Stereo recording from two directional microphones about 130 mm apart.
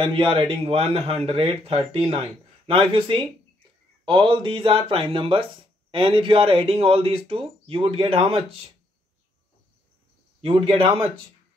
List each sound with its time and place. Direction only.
0.0 s speech: 40° right (ahead or behind)
10.4 s speech: 45° right (ahead or behind)